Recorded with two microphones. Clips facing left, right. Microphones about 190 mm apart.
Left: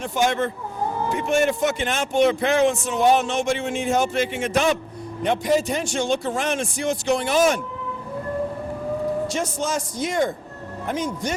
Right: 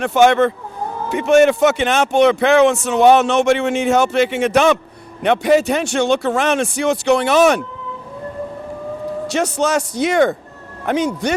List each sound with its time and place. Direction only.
0.0 s a man's voice: 70° right (ahead or behind)
9.2 s a man's voice: 70° right (ahead or behind)